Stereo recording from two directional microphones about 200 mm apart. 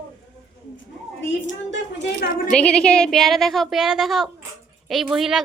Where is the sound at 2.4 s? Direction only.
5° left (ahead or behind).